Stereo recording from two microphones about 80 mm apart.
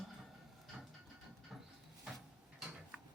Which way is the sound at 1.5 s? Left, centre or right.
Centre.